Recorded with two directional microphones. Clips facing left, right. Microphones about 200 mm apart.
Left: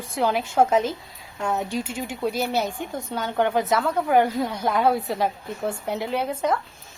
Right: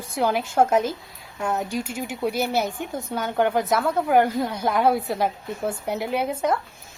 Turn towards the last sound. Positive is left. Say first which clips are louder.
# right 1 dB
turn(degrees=-10)  # may be behind; listen again after turning